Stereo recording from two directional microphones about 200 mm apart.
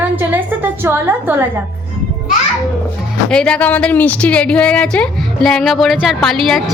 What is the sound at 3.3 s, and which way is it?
A woman's voice, 5° left (ahead or behind).